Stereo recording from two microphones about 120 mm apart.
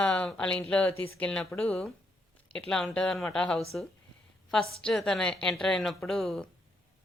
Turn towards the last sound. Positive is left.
turn(degrees=0)  # may be behind; listen again after turning